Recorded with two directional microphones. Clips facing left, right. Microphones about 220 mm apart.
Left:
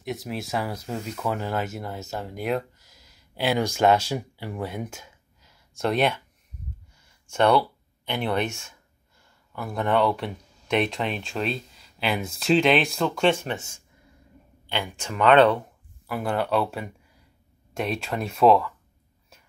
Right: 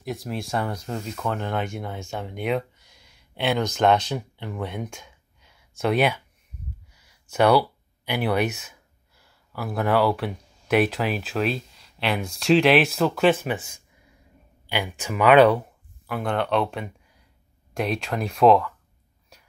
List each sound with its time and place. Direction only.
0.0 s speech: centre (ahead or behind)
6.9 s a sound: 5° right (ahead or behind)
9.2 s speech: 5° right (ahead or behind)
14.7 s speech: 5° right (ahead or behind)
16.1 s speech: 5° left (ahead or behind)